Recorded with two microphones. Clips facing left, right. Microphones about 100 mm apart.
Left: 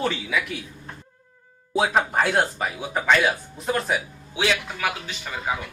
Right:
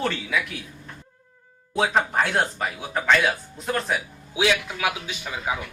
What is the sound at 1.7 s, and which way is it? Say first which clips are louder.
Speech: left 1 dB; 5° left (ahead or behind).